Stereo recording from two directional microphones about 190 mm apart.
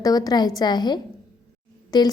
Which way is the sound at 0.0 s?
20° left (ahead or behind).